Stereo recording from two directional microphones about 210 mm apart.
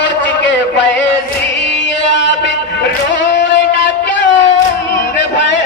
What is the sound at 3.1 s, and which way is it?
Music, 55° left (ahead or behind).